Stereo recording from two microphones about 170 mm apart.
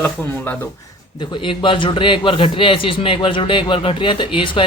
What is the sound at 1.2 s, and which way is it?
A man's voice, 30° left (ahead or behind).